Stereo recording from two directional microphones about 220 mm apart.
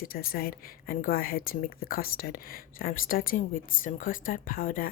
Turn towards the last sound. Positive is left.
turn(degrees=40)  # may be behind; listen again after turning